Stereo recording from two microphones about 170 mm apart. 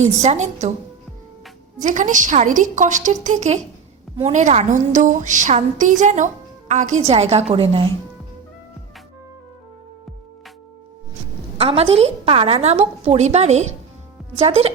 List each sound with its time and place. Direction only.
0.0 s a woman's voice: 40° right (ahead or behind)
1.8 s a woman's voice: 45° right (ahead or behind)
11.5 s a woman's voice: 35° right (ahead or behind)